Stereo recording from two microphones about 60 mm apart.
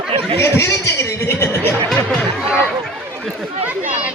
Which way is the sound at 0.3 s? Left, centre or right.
Left.